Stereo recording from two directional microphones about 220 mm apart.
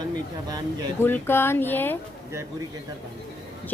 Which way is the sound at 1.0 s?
10° left (ahead or behind).